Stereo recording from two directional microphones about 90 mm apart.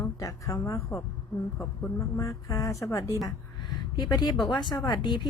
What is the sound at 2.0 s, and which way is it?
Speech, 35° left (ahead or behind).